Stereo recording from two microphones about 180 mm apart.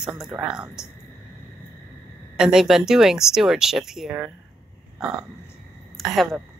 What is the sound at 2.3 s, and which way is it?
Speech, 5° right (ahead or behind).